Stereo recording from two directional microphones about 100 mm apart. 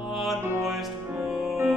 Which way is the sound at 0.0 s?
Centre (ahead or behind).